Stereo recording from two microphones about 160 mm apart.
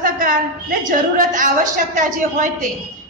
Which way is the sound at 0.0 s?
60° right (ahead or behind).